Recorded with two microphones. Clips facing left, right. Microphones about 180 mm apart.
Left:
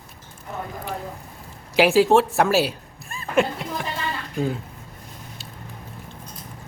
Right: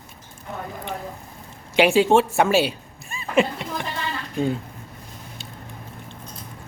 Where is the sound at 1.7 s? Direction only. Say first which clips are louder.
Even; centre (ahead or behind).